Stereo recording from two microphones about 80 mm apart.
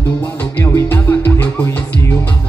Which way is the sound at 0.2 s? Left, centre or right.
Left.